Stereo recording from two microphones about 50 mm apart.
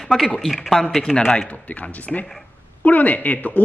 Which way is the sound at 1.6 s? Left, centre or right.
Left.